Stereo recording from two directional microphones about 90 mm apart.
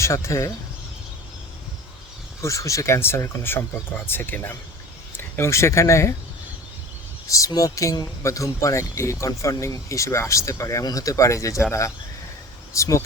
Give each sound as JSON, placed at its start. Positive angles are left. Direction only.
{"t": 0.0, "sound": "speech", "side_deg": 30}
{"t": 2.4, "sound": "speech", "side_deg": 35}
{"t": 7.3, "sound": "speech", "side_deg": 35}
{"t": 12.7, "sound": "speech", "side_deg": 35}